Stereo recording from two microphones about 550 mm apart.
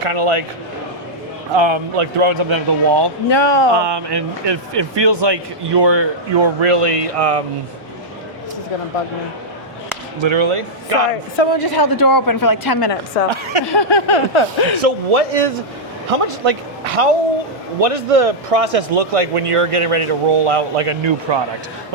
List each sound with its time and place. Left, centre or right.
0.0 s speech: right
1.5 s speech: right
3.2 s a sound: left
3.8 s speech: right
10.2 s speech: right
11.6 s speech: left
13.3 s speech: right
13.7 s a sound: left
14.8 s a man's voice: right
16.0 s a man's voice: right